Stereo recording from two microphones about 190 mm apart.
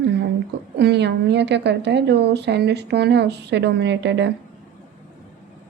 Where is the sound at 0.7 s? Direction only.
60° right (ahead or behind).